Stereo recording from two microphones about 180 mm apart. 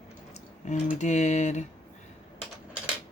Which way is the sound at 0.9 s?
40° left (ahead or behind).